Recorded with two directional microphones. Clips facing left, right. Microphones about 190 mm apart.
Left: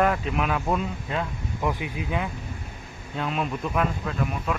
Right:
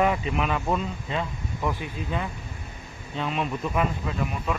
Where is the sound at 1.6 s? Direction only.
15° left (ahead or behind).